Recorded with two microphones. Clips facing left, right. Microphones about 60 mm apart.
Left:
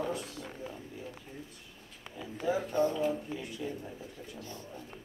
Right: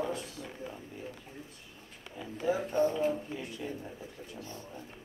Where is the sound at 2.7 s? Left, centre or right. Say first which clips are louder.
Right 1 dB; right.